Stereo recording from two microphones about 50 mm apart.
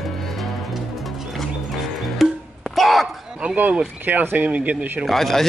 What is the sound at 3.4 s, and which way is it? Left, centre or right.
Speech, right.